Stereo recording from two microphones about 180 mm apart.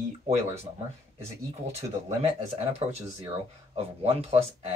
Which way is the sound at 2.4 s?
35° right (ahead or behind).